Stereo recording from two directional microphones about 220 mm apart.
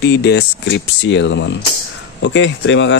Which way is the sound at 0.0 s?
50° left (ahead or behind).